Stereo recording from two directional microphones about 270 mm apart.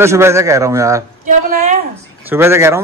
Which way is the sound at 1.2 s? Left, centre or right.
Right.